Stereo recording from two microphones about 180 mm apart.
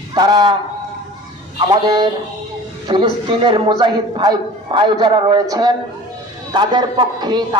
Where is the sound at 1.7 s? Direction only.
25° right (ahead or behind).